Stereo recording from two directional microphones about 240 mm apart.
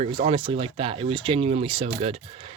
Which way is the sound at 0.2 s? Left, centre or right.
Right.